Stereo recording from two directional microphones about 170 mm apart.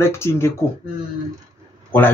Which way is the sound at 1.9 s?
10° left (ahead or behind).